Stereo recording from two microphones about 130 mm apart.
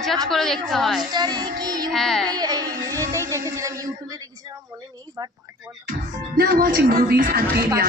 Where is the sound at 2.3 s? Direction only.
30° right (ahead or behind).